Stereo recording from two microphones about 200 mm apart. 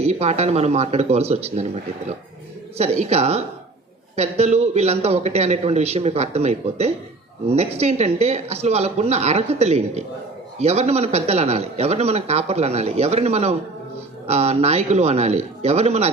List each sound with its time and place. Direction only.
0.0 s a man's voice: 30° right (ahead or behind)